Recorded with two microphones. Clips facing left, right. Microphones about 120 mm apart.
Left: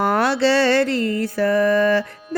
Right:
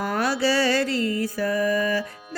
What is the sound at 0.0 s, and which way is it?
Music, 65° left (ahead or behind).